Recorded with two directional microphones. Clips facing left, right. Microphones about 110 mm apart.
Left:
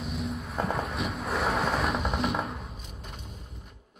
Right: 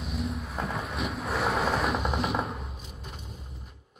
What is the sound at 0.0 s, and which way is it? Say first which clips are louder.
Boat: even; centre (ahead or behind).